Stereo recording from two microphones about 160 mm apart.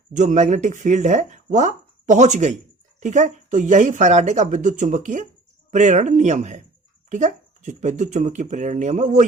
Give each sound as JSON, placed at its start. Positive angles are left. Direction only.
{"t": 0.1, "sound": "speech", "side_deg": -50}